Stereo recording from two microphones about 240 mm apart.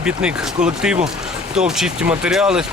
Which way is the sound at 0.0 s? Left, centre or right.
Centre.